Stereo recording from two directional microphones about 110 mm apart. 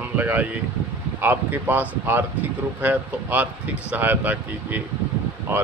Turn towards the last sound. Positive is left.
turn(degrees=-15)  # may be behind; listen again after turning